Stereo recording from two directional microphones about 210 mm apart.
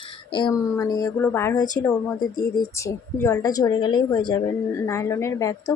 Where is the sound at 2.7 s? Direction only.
15° left (ahead or behind).